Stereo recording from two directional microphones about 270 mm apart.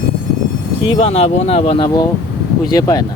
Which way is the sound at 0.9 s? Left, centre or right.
Left.